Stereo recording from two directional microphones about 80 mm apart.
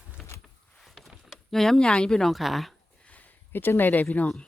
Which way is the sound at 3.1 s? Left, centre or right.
Left.